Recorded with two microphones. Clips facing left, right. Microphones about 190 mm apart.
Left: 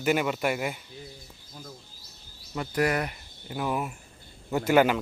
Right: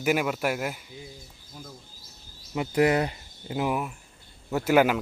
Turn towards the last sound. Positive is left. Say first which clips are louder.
# even
turn(degrees=-5)  # may be behind; listen again after turning